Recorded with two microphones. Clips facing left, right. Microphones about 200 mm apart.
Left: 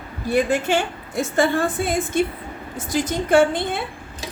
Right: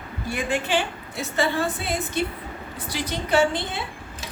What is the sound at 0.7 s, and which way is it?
A woman's voice, 45° left (ahead or behind).